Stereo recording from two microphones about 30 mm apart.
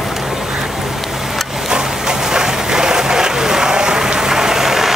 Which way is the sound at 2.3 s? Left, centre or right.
Centre.